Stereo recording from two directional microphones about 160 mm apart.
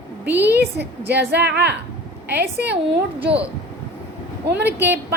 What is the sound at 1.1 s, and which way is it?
Speech, 90° right.